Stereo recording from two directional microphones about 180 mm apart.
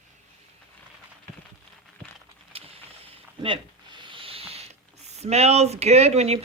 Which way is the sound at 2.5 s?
30° right (ahead or behind).